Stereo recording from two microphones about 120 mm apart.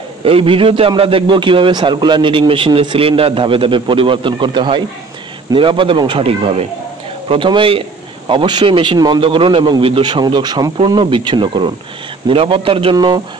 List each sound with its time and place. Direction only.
0.2 s a man's voice: 50° right (ahead or behind)
12.9 s a man's voice: 35° right (ahead or behind)